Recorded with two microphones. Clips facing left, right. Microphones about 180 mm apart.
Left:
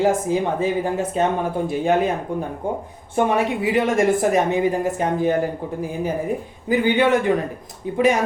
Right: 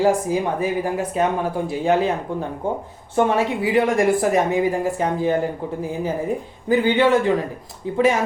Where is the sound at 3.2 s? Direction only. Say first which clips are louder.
Right 1 dB; 15° left (ahead or behind).